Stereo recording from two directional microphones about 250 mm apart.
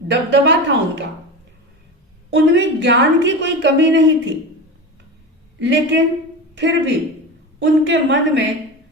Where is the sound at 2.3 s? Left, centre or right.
Right.